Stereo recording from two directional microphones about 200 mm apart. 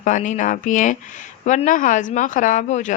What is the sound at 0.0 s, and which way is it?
A woman's voice, 40° left (ahead or behind).